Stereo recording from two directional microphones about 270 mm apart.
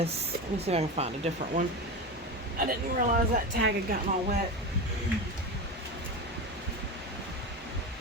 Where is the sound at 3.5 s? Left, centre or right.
Right.